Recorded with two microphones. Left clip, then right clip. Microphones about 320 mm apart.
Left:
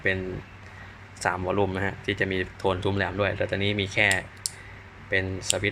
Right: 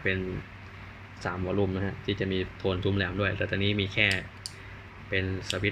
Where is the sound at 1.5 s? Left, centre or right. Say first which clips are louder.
Left 4 dB; left.